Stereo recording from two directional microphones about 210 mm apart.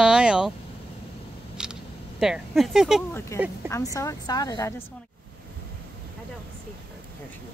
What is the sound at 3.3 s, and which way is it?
Speech, 15° left (ahead or behind).